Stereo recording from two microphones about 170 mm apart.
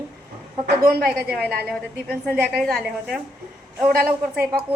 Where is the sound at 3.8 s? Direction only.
65° right (ahead or behind).